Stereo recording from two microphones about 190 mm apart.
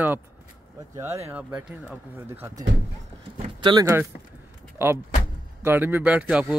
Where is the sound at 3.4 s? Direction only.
25° right (ahead or behind).